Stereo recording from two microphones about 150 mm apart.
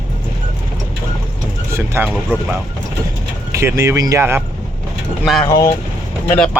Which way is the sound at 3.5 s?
20° right (ahead or behind).